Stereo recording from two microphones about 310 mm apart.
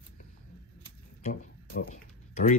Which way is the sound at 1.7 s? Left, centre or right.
Left.